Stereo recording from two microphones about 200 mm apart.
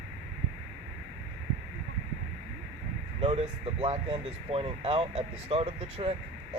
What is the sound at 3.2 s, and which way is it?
Speech, 30° right (ahead or behind).